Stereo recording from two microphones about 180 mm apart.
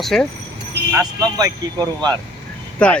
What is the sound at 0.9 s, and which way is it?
Speech, 20° right (ahead or behind).